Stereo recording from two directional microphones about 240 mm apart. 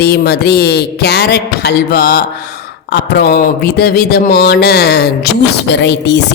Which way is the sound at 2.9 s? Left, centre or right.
Left.